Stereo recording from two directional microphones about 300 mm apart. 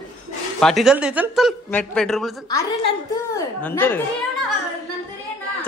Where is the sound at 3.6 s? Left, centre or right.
Centre.